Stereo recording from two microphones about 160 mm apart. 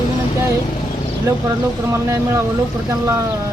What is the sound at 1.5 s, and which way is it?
Speech, 20° right (ahead or behind).